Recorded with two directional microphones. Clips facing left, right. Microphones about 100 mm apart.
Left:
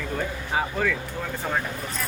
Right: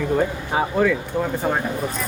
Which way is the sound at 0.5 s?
30° right (ahead or behind).